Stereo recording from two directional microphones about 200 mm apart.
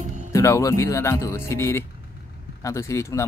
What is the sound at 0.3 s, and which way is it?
Speech, 15° left (ahead or behind).